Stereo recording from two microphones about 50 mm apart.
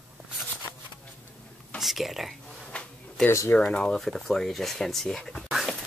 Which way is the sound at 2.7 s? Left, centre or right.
Left.